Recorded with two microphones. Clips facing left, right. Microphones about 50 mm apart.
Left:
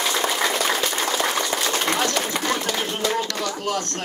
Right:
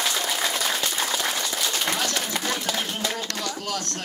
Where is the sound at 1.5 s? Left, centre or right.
Left.